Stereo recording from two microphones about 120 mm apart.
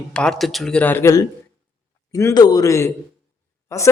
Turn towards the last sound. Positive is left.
turn(degrees=25)  # may be behind; listen again after turning